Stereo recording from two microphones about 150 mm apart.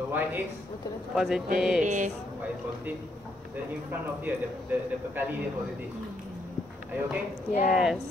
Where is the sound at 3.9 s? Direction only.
10° right (ahead or behind).